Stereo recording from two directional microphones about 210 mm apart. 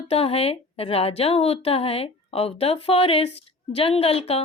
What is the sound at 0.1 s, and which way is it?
A woman's voice, 30° left (ahead or behind).